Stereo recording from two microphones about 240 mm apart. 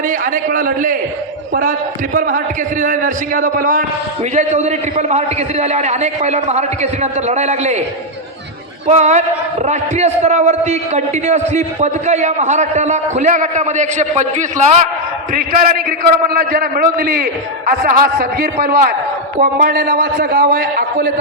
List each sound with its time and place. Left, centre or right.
0.1 s a man's voice: right
2.1 s a man's voice: right
8.9 s a man's voice: right